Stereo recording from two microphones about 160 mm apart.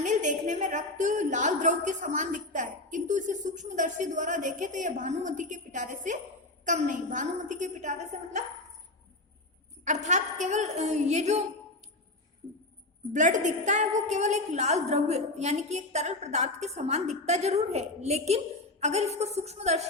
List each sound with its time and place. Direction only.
0.0 s a woman's voice: 50° right (ahead or behind)
9.8 s a woman's voice: 50° right (ahead or behind)
13.1 s a woman's voice: 50° right (ahead or behind)